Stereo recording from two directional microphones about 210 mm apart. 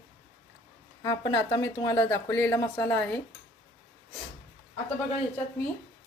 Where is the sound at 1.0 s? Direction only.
15° left (ahead or behind).